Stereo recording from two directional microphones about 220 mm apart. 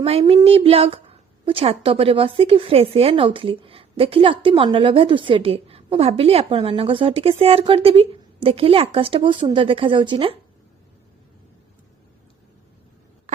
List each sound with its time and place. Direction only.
0.0 s a woman's voice: 25° right (ahead or behind)